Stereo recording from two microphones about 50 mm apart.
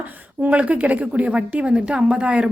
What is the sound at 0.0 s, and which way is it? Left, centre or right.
A woman's voice, right.